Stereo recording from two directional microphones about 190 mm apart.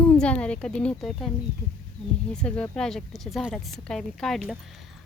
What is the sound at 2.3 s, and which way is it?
Speech, 5° left (ahead or behind).